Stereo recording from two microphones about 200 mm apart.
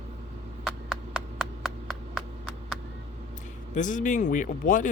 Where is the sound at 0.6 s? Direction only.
5° right (ahead or behind).